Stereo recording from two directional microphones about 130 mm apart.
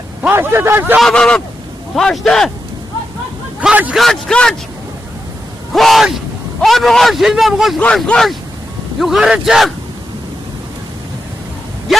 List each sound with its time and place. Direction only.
0.2 s speech: 15° right (ahead or behind)
0.9 s a man's voice: 5° left (ahead or behind)
3.6 s speech: 10° right (ahead or behind)
3.9 s a man's voice: 5° left (ahead or behind)
5.7 s a man's voice: centre (ahead or behind)
11.9 s a sound: centre (ahead or behind)